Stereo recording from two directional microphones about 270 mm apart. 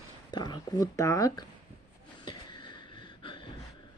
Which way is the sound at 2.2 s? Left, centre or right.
Centre.